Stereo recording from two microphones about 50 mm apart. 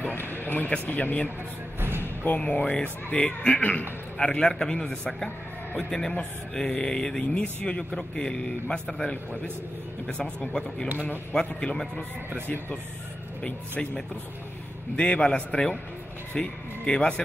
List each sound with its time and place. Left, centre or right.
0.1 s a sound: left
0.8 s speech: left
4.2 s a man's voice: centre
10.0 s a man's voice: left
15.0 s speech: left